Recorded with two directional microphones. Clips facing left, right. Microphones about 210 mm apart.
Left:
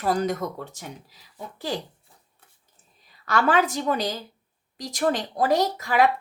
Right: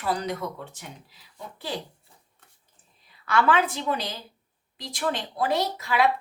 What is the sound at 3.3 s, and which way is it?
Speech, 40° left (ahead or behind).